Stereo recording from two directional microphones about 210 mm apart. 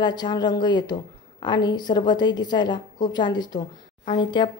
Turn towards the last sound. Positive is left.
turn(degrees=20)  # may be behind; listen again after turning